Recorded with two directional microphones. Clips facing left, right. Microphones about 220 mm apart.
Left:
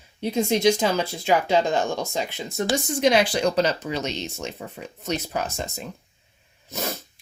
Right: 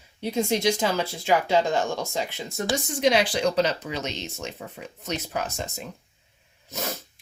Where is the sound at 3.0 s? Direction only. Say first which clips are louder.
Left 2 dB; 50° left (ahead or behind); by 5.7 s 30° left (ahead or behind).